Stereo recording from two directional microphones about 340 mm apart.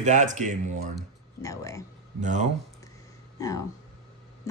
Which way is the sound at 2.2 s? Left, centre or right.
Right.